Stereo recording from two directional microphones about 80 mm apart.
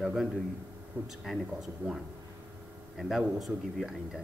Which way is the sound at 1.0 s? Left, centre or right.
Right.